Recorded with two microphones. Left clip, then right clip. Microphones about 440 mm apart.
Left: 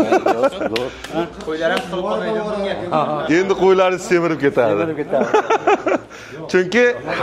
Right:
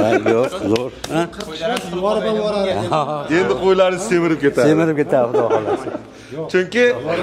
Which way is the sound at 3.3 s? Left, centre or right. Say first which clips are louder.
Even; left.